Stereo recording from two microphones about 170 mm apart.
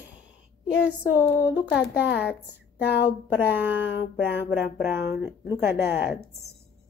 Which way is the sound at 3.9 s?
80° left.